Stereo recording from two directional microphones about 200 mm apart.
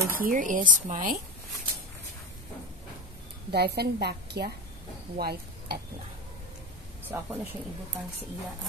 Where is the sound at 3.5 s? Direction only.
55° right (ahead or behind).